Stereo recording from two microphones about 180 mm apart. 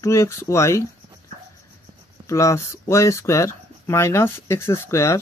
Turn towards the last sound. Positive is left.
turn(degrees=15)  # may be behind; listen again after turning